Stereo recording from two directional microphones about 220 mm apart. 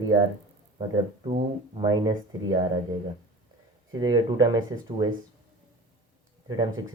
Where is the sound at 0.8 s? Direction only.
20° right (ahead or behind).